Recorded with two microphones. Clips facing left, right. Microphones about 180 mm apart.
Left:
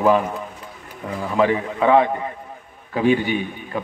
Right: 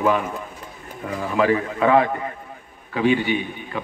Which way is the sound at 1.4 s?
25° left (ahead or behind).